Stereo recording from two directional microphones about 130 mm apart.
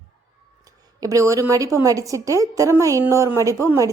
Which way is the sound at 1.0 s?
25° right (ahead or behind).